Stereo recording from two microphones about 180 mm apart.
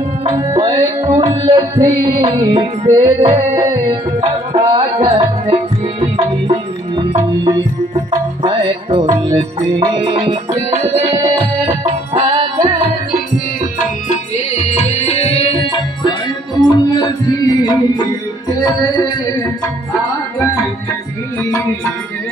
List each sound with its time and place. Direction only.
0.2 s music: 20° right (ahead or behind)
4.6 s music: 25° right (ahead or behind)
8.1 s music: 30° right (ahead or behind)
11.8 s music: 30° right (ahead or behind)
14.0 s music: 40° left (ahead or behind); by 18.0 s 20° left (ahead or behind)
21.5 s music: 15° left (ahead or behind)